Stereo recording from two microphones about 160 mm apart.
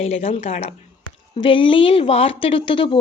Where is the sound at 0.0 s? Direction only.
40° left (ahead or behind).